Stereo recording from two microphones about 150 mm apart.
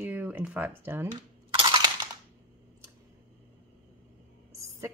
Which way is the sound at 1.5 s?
35° right (ahead or behind).